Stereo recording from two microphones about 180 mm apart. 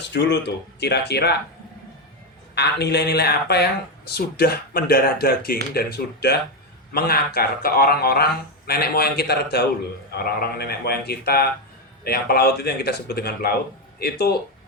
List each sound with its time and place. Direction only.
0.1 s speech: 70° left (ahead or behind)
2.6 s speech: 65° left (ahead or behind)